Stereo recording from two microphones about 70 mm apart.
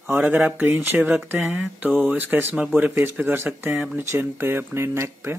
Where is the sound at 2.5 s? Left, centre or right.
Centre.